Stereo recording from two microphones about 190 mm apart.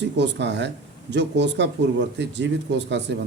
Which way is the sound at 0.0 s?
65° right (ahead or behind).